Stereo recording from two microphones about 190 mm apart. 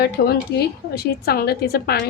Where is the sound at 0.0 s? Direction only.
55° left (ahead or behind).